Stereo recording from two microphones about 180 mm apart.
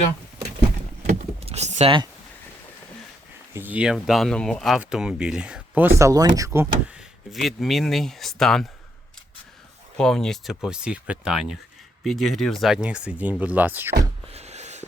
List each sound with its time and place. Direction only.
1.0 s vehicle: 40° right (ahead or behind)
3.5 s speech: 10° right (ahead or behind)
6.0 s speech: 20° right (ahead or behind)
7.3 s speech: centre (ahead or behind)
10.0 s speech: 5° left (ahead or behind)
14.3 s a sound: 40° right (ahead or behind)